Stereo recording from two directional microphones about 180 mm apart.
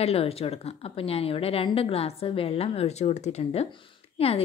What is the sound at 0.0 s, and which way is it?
A woman's voice, 35° left (ahead or behind).